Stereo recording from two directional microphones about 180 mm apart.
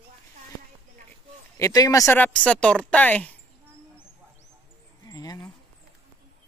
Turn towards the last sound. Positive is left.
turn(degrees=20)  # may be behind; listen again after turning